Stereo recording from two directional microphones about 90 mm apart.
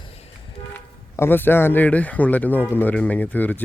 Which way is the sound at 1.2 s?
25° left (ahead or behind).